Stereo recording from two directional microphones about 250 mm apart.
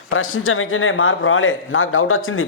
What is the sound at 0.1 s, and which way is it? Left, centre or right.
A man's voice, left.